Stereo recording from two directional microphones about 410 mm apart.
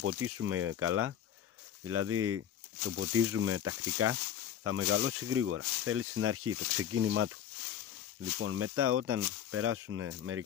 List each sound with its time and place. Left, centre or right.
0.0 s speech: right
8.4 s speech: right